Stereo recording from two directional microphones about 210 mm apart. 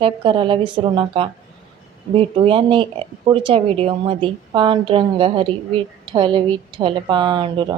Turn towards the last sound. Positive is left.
turn(degrees=-25)  # may be behind; listen again after turning